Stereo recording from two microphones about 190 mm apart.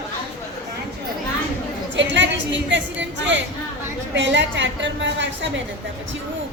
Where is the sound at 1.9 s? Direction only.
70° right (ahead or behind).